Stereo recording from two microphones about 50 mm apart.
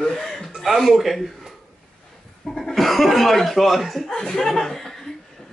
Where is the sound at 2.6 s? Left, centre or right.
Centre.